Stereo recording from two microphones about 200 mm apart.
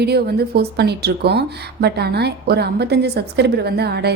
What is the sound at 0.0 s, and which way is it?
Speech, 55° right (ahead or behind).